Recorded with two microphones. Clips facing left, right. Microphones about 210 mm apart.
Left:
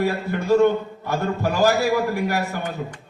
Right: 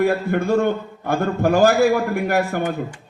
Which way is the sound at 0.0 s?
50° right (ahead or behind).